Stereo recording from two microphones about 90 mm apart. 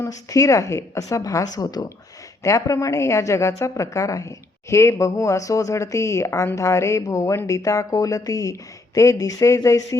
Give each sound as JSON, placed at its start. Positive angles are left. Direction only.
{"t": 0.0, "sound": "a woman's voice", "side_deg": 40}
{"t": 2.4, "sound": "a woman's voice", "side_deg": 35}